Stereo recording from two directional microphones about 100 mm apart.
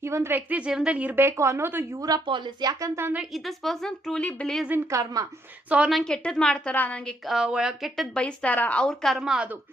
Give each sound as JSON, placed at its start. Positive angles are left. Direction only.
{"t": 0.0, "sound": "a woman's voice", "side_deg": -25}
{"t": 2.0, "sound": "a woman's voice", "side_deg": -40}
{"t": 2.9, "sound": "a woman's voice", "side_deg": -25}
{"t": 3.2, "sound": "a woman's voice", "side_deg": 0}
{"t": 4.9, "sound": "a woman's voice", "side_deg": -30}
{"t": 5.6, "sound": "speech", "side_deg": -15}
{"t": 5.9, "sound": "speech", "side_deg": 5}
{"t": 7.3, "sound": "a woman's voice", "side_deg": -5}
{"t": 8.2, "sound": "speech", "side_deg": 15}